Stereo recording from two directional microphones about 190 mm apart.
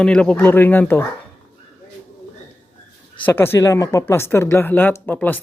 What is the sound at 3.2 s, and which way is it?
Speech, 10° left (ahead or behind).